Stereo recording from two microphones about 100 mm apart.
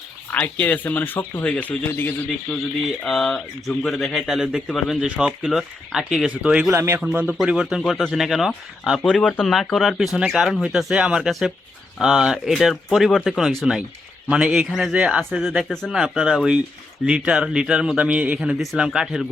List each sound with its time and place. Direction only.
0.3 s speech: 15° left (ahead or behind)
3.0 s speech: centre (ahead or behind)
6.7 s speech: 25° right (ahead or behind)
7.3 s speech: 5° right (ahead or behind)
9.0 s speech: 10° left (ahead or behind)
14.3 s speech: 10° right (ahead or behind)
15.4 s speech: 5° left (ahead or behind)